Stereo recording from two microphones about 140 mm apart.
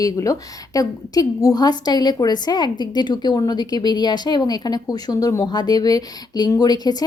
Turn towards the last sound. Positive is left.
turn(degrees=30)  # may be behind; listen again after turning